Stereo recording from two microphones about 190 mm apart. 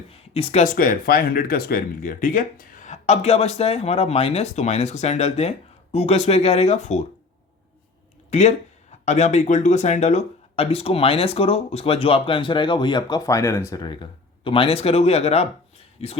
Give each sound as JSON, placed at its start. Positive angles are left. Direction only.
{"t": 0.1, "sound": "speech", "side_deg": 30}
{"t": 8.3, "sound": "speech", "side_deg": 35}